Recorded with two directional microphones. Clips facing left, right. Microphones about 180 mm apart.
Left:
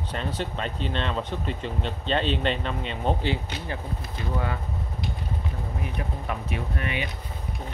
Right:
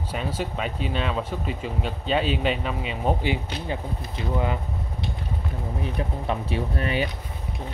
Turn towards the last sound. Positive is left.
turn(degrees=-35)  # may be behind; listen again after turning